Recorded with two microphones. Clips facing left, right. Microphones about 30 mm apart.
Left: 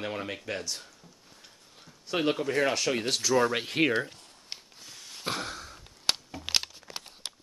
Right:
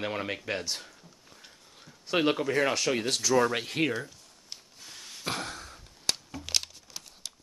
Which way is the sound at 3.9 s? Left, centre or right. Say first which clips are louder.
Left 6 dB; left.